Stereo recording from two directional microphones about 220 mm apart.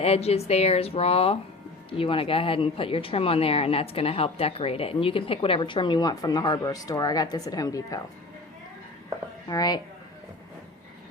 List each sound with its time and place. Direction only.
0.0 s speech: 30° left (ahead or behind)
9.5 s a woman's voice: 20° left (ahead or behind)